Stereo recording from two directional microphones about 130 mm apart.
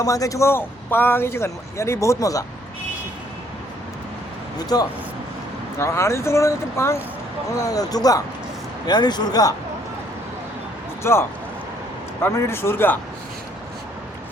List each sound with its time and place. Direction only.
0.0 s a man's voice: 25° left (ahead or behind)
4.5 s a man's voice: 30° left (ahead or behind)
11.0 s a man's voice: 20° left (ahead or behind)